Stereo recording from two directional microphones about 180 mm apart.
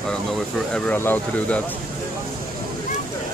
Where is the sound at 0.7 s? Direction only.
5° left (ahead or behind).